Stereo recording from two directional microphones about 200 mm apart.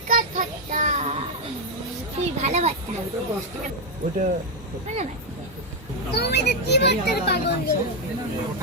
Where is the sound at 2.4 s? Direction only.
35° right (ahead or behind).